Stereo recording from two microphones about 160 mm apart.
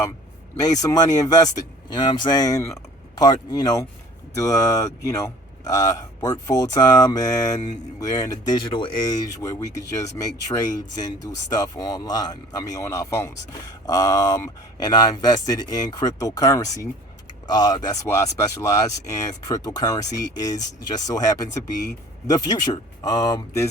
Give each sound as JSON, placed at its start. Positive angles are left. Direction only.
{"t": 0.5, "sound": "a man's voice", "side_deg": 25}